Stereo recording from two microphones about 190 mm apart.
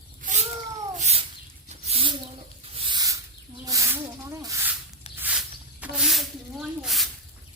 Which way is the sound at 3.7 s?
15° right (ahead or behind).